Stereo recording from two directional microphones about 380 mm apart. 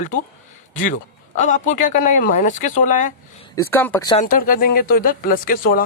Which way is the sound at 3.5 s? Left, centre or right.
Centre.